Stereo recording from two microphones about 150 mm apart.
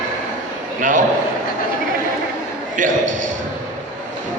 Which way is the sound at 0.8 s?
60° right (ahead or behind).